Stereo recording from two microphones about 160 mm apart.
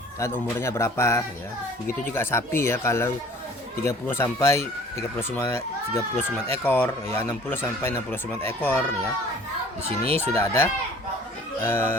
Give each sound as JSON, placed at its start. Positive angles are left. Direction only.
{"t": 0.2, "sound": "speech", "side_deg": 15}
{"t": 10.2, "sound": "speech", "side_deg": 15}